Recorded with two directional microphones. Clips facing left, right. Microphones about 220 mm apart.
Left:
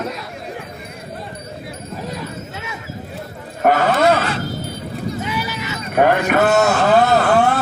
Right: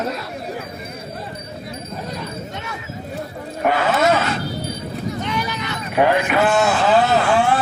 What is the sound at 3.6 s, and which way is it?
Roaring cats, 45° left (ahead or behind).